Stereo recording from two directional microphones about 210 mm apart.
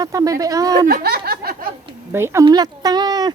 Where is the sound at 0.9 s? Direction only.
50° right (ahead or behind).